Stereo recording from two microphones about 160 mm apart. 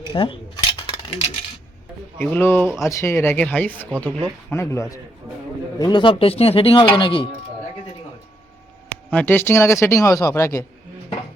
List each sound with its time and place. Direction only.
0.1 s speech: 35° left (ahead or behind)
0.8 s stir: 35° left (ahead or behind)
2.1 s speech: 10° left (ahead or behind)
5.8 s speech: 30° left (ahead or behind)
9.0 s speech: 10° left (ahead or behind)